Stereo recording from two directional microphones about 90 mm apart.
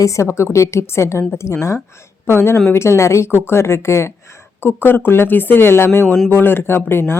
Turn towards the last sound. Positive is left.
turn(degrees=25)  # may be behind; listen again after turning